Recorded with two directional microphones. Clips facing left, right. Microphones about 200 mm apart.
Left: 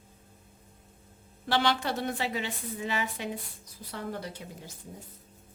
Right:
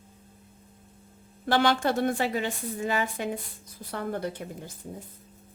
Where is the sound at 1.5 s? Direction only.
50° right (ahead or behind).